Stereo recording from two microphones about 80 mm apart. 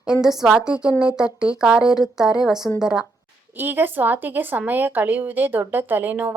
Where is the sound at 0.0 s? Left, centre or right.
Centre.